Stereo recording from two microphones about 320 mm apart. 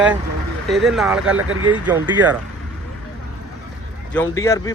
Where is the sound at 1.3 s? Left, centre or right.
Right.